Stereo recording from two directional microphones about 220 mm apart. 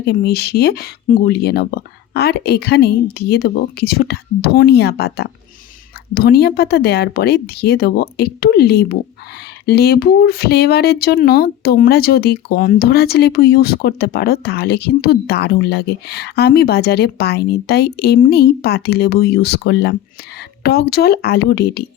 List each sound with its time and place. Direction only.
0.0 s speech: 45° left (ahead or behind)